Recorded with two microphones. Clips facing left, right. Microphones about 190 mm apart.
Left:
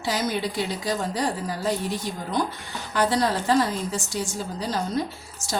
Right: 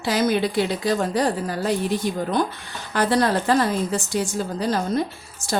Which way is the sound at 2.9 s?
60° right (ahead or behind).